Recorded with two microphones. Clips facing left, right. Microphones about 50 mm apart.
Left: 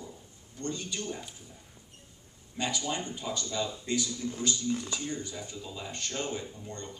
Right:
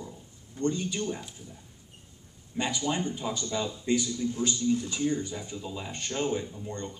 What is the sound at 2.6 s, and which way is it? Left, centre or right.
A man's voice, centre.